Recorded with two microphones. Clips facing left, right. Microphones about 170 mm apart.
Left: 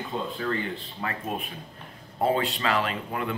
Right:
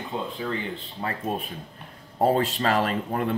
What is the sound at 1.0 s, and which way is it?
Speech, 30° right (ahead or behind).